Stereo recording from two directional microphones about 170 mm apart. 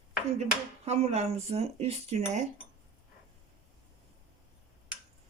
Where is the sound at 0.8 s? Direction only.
40° right (ahead or behind).